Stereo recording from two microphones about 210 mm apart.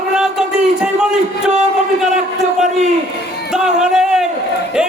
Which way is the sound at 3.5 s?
5° right (ahead or behind).